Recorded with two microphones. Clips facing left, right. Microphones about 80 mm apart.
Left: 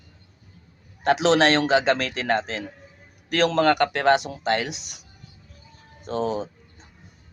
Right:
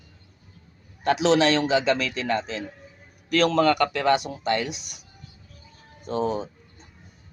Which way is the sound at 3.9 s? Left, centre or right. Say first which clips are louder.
Left 2 dB; left.